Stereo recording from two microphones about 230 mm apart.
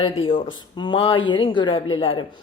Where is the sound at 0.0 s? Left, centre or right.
Left.